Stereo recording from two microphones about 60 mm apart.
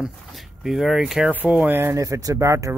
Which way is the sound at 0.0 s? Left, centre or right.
Centre.